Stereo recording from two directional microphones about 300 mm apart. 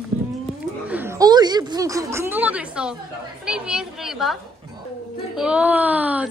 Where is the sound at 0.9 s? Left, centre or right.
Centre.